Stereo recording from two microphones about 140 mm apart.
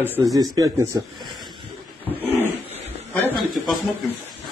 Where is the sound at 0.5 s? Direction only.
25° right (ahead or behind).